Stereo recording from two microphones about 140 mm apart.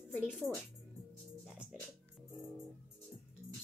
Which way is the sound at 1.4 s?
5° right (ahead or behind).